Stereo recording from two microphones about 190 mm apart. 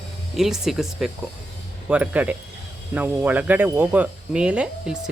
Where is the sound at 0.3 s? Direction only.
Centre (ahead or behind).